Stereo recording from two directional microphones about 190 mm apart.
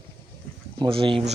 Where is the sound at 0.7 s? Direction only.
25° right (ahead or behind).